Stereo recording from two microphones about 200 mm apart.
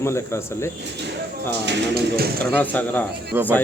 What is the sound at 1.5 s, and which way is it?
Speech, 55° right (ahead or behind).